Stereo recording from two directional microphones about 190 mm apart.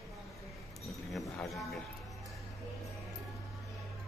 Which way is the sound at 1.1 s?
Centre (ahead or behind).